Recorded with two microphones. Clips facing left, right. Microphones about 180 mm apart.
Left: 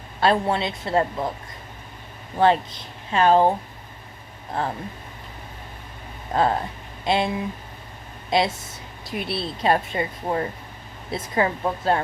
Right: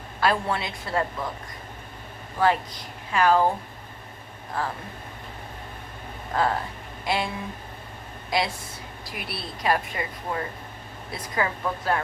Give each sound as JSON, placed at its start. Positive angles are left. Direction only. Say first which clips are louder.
{"t": 0.2, "sound": "a woman's voice", "louder": "left 4 dB", "side_deg": 25}
{"t": 2.4, "sound": "a woman's voice", "louder": "left 4 dB", "side_deg": 25}
{"t": 4.6, "sound": "a woman's voice", "louder": "left 3 dB", "side_deg": 25}
{"t": 6.3, "sound": "a woman's voice", "louder": "left 4 dB", "side_deg": 25}
{"t": 8.3, "sound": "a woman's voice", "louder": "left 5 dB", "side_deg": 25}